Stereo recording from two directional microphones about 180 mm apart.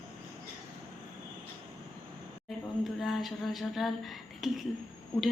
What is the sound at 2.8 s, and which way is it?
A woman's voice, centre (ahead or behind).